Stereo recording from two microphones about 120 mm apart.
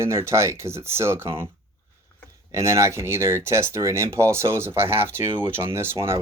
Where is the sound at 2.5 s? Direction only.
25° right (ahead or behind).